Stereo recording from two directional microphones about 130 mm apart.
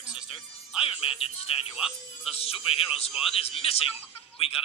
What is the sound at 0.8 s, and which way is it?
Speech, 45° left (ahead or behind).